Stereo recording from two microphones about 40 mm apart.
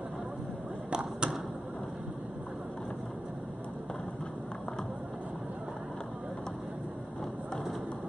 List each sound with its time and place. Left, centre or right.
0.8 s arrow: right